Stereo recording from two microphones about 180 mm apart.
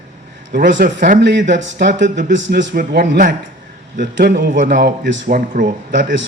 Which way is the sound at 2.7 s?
65° right (ahead or behind).